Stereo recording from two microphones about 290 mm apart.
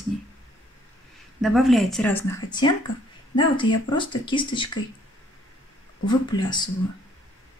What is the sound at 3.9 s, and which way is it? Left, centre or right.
Speech, centre.